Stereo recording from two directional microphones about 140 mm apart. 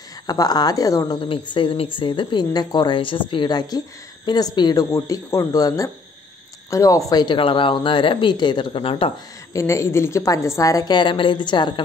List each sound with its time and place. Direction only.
0.3 s a woman's voice: 30° left (ahead or behind)
9.5 s a woman's voice: 20° left (ahead or behind)